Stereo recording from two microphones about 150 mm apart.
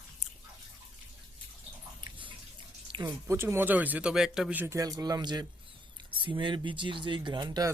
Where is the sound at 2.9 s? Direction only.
30° right (ahead or behind).